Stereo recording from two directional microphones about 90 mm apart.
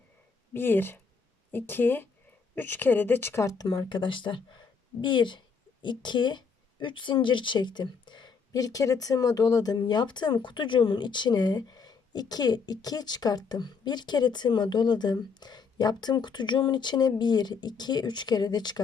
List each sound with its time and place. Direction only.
0.5 s speech: 25° left (ahead or behind)
3.6 s speech: 60° left (ahead or behind)